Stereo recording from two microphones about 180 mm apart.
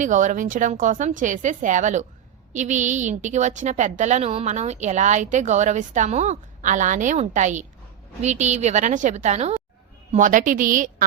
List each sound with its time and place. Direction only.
0.0 s a woman's voice: 45° right (ahead or behind)